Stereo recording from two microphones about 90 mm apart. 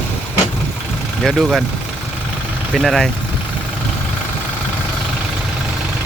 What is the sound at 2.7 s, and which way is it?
Speech, centre (ahead or behind).